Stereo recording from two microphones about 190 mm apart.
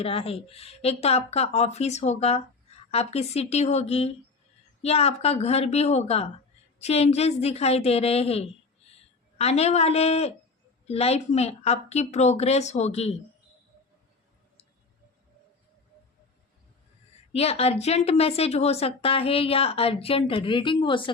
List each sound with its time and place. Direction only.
0.0 s a woman's voice: 30° left (ahead or behind)
17.3 s a woman's voice: 30° left (ahead or behind)